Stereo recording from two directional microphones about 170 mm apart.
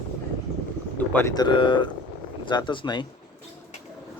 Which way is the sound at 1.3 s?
25° left (ahead or behind).